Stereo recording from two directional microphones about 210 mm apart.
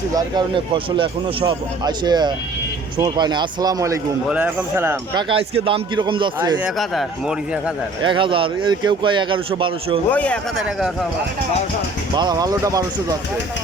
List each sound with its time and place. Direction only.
0.1 s speech: 20° right (ahead or behind)
5.3 s speech: 25° right (ahead or behind)
6.7 s speech: centre (ahead or behind)
8.0 s speech: 25° right (ahead or behind)
10.1 s speech: 5° left (ahead or behind)
12.1 s speech: 20° right (ahead or behind)